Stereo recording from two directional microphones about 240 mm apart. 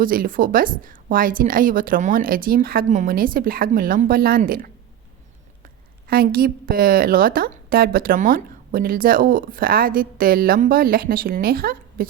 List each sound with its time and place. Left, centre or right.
0.0 s a woman's voice: right
6.1 s a woman's voice: right